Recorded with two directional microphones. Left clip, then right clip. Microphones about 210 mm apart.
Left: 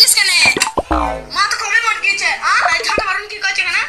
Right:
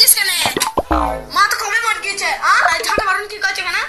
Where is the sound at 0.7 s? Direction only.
Centre (ahead or behind).